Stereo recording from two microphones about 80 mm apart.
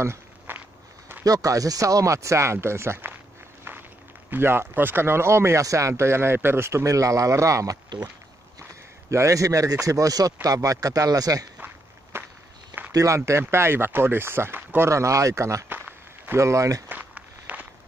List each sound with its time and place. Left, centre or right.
0.0 s walk: right
1.2 s speech: right
4.3 s speech: right
9.1 s speech: right
11.6 s walk: right
12.9 s speech: right
14.9 s speech: right
16.9 s walk: right